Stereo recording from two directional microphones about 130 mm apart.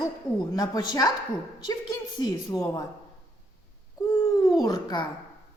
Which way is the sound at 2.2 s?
30° left (ahead or behind).